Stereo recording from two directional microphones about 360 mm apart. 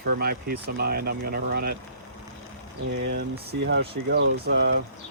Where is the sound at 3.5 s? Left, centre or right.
Right.